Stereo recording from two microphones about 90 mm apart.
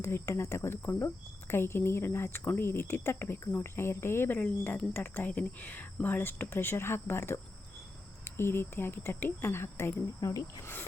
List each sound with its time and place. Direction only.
0.0 s speech: 30° left (ahead or behind)
10.2 s speech: 40° left (ahead or behind)
10.6 s speech: 25° left (ahead or behind)